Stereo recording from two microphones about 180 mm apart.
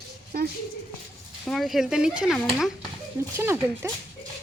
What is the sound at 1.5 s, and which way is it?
Speech, centre (ahead or behind).